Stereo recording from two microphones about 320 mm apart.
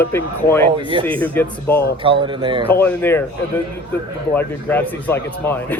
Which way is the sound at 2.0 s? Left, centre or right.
Centre.